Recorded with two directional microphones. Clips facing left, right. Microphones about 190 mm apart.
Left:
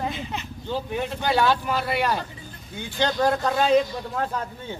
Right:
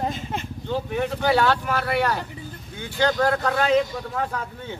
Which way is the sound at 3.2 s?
15° left (ahead or behind).